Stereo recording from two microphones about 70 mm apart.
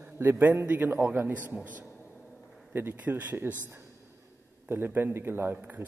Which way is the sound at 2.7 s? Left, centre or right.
Right.